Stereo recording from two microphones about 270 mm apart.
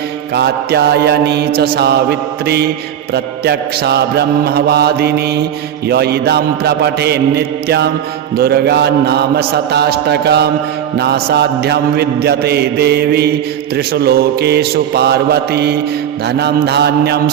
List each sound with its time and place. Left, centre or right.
0.3 s mantra: right